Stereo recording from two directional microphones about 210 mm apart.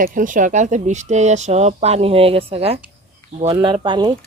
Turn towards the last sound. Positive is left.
turn(degrees=-20)  # may be behind; listen again after turning